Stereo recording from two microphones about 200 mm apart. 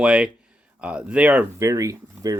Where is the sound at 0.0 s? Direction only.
5° right (ahead or behind).